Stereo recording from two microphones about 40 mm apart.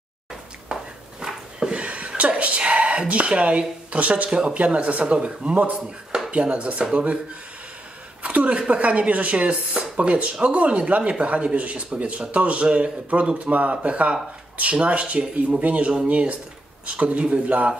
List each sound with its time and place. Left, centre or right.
0.7 s a sound: right
4.3 s speech: right
4.6 s speech: right
8.2 s a sound: right
8.5 s speech: right
13.1 s speech: right